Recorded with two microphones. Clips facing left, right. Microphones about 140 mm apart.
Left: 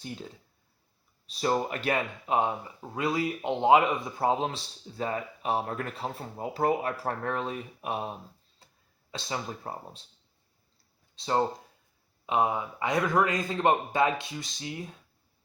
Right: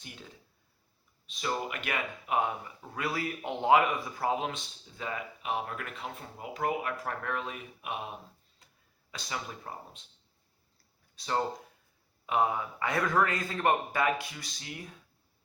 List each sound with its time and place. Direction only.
1.3 s a man's voice: 35° left (ahead or behind)
8.6 s a sound: 30° left (ahead or behind)
9.1 s a man's voice: 30° left (ahead or behind)
11.1 s a man's voice: 25° left (ahead or behind)